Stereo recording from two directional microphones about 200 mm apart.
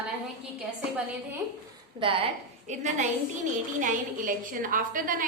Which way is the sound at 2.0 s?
30° right (ahead or behind).